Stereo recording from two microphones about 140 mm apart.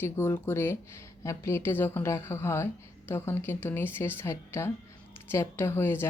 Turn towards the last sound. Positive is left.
turn(degrees=15)  # may be behind; listen again after turning